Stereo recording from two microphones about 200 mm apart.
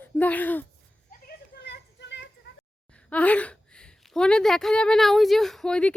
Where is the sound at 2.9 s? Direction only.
5° left (ahead or behind).